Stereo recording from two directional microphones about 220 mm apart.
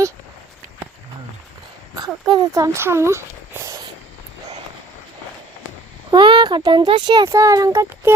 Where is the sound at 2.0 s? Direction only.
20° right (ahead or behind).